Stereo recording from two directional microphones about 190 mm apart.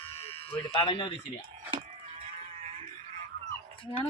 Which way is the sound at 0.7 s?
25° left (ahead or behind).